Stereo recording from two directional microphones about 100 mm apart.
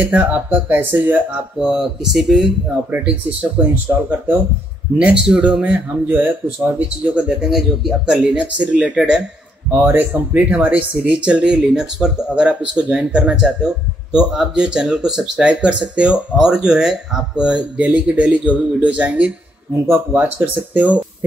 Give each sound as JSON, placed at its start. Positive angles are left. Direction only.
{"t": 0.0, "sound": "speech", "side_deg": -15}
{"t": 1.6, "sound": "speech", "side_deg": -5}
{"t": 2.9, "sound": "speech", "side_deg": -15}